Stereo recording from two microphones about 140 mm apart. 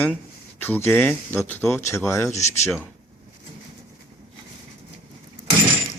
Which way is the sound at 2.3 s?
55° left (ahead or behind).